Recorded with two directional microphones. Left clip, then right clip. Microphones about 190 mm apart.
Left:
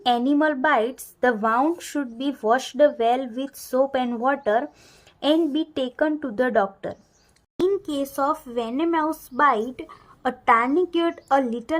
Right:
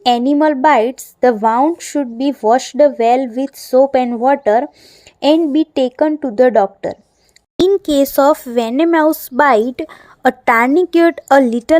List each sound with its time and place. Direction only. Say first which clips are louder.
0.0 s a woman's voice: right 8 dB; 30° right (ahead or behind)
7.8 s a woman's voice: right 13 dB; 40° right (ahead or behind)